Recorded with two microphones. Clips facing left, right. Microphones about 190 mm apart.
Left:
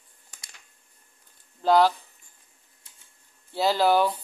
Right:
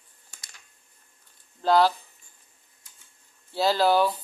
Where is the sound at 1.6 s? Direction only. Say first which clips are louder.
Left 1 dB; 15° left (ahead or behind).